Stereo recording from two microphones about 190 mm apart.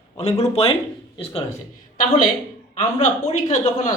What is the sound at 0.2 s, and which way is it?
Speech, 35° left (ahead or behind).